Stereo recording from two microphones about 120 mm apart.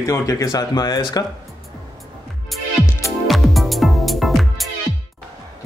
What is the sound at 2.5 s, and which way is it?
Music, centre (ahead or behind).